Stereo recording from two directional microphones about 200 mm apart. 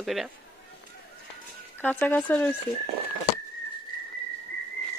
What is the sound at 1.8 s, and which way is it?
Speech, 5° left (ahead or behind).